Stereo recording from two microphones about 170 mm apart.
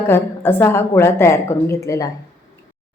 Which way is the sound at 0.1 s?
15° left (ahead or behind).